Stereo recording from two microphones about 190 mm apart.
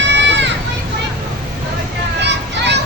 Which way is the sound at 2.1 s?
65° right (ahead or behind).